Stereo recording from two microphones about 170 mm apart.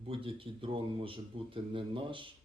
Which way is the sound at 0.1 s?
30° right (ahead or behind).